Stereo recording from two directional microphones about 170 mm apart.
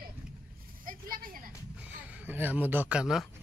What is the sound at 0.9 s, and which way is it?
Speech, 55° right (ahead or behind).